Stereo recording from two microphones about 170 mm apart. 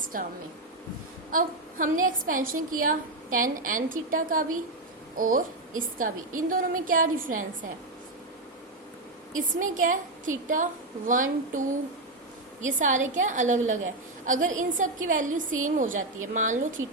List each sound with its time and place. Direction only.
0.1 s a woman's voice: 55° right (ahead or behind)
9.6 s a woman's voice: 50° right (ahead or behind)
12.6 s a woman's voice: 45° right (ahead or behind)